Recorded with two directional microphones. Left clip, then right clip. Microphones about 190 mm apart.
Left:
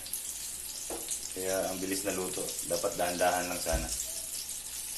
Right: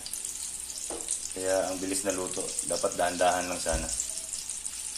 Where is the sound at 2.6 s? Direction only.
40° right (ahead or behind).